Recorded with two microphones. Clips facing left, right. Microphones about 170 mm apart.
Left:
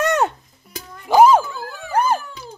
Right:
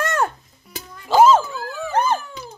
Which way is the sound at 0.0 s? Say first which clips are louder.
Left 3 dB; 20° left (ahead or behind).